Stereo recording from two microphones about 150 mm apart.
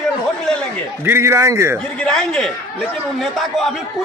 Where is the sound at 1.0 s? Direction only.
15° right (ahead or behind).